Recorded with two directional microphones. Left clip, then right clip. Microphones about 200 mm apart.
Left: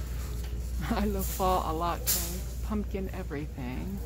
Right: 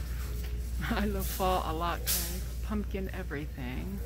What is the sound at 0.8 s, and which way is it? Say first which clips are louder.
Speech: left 1 dB; 5° left (ahead or behind).